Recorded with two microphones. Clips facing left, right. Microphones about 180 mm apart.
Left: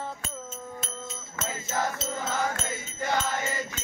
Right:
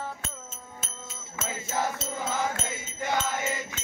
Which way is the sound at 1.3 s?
10° right (ahead or behind).